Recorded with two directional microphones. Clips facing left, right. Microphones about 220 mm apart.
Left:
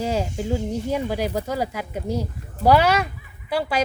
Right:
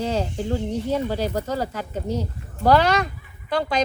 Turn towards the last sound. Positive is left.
turn(degrees=10)  # may be behind; listen again after turning